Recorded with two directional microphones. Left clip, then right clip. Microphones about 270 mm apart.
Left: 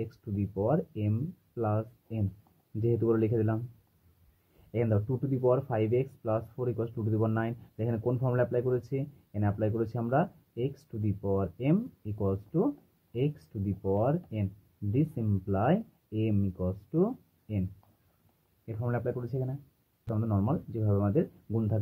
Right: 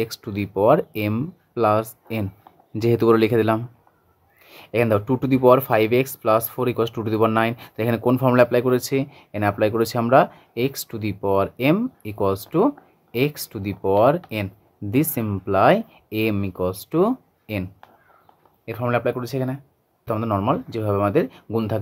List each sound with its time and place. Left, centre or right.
0.7 s speech: right
4.7 s speech: right
18.8 s speech: right